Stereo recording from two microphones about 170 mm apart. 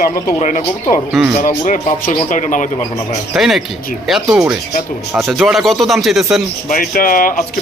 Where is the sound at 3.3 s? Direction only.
Centre (ahead or behind).